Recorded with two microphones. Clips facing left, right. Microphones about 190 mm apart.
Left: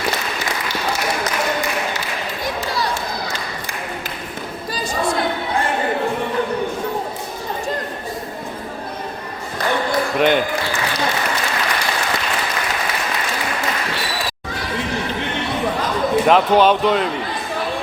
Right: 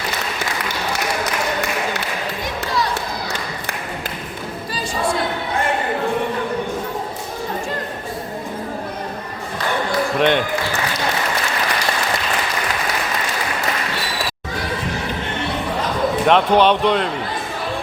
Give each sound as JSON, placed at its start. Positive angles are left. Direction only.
{"t": 10.2, "sound": "speech", "side_deg": 5}
{"t": 16.2, "sound": "speech", "side_deg": 5}